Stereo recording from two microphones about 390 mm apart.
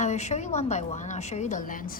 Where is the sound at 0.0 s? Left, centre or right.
Centre.